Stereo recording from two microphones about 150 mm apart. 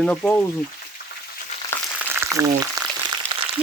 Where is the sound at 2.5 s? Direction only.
20° right (ahead or behind).